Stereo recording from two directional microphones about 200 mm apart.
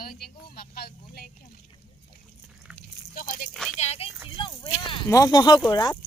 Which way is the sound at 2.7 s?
45° left (ahead or behind).